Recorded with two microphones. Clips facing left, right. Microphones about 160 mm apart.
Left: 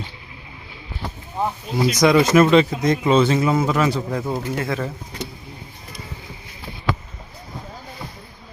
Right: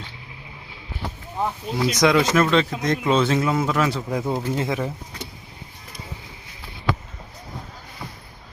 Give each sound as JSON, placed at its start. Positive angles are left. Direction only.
{"t": 1.4, "sound": "speech", "side_deg": 10}
{"t": 4.3, "sound": "speech", "side_deg": -20}